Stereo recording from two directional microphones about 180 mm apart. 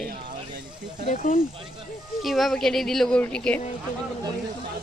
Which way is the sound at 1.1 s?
45° left (ahead or behind).